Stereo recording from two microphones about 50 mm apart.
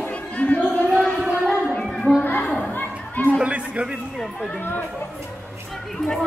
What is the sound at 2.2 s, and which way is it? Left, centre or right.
Children playing, left.